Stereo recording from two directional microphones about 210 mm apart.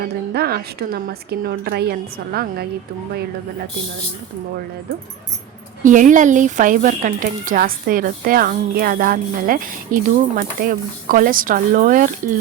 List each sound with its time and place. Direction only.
0.0 s a woman's voice: 45° right (ahead or behind)
5.8 s speech: 35° right (ahead or behind)